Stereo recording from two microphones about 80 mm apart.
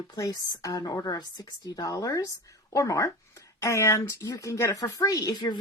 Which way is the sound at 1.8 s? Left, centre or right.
Left.